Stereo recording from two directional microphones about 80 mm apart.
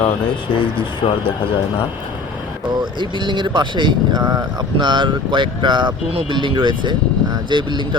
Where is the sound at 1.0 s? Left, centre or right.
Left.